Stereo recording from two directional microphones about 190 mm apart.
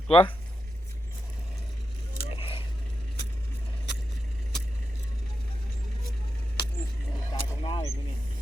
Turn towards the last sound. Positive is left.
turn(degrees=20)  # may be behind; listen again after turning